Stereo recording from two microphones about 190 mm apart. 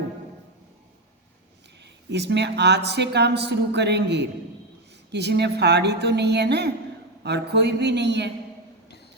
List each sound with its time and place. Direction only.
1.8 s a woman's voice: 65° right (ahead or behind)